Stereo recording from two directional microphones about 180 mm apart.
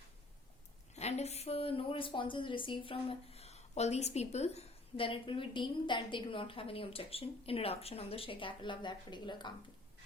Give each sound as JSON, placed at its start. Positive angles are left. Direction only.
{"t": 0.9, "sound": "a woman's voice", "side_deg": 35}